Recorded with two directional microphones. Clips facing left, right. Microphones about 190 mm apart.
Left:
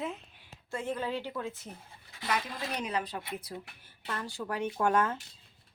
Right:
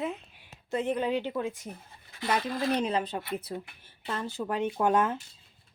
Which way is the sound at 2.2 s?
30° right (ahead or behind).